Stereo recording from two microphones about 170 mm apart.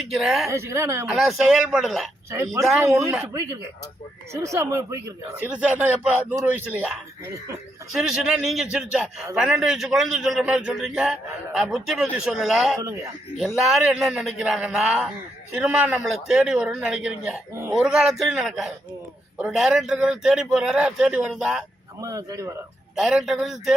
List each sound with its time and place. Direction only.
0.1 s a man's voice: centre (ahead or behind)
0.4 s speech: 15° right (ahead or behind)
1.1 s a man's voice: centre (ahead or behind)
2.7 s speech: 15° right (ahead or behind)
7.9 s a man's voice: 5° right (ahead or behind)
12.8 s a man's voice: 20° right (ahead or behind)
13.4 s a man's voice: centre (ahead or behind)
22.0 s a man's voice: 20° right (ahead or behind)
23.0 s a man's voice: centre (ahead or behind)